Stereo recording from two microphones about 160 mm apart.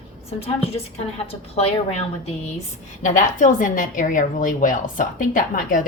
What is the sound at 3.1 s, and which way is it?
A woman's voice, 55° left (ahead or behind).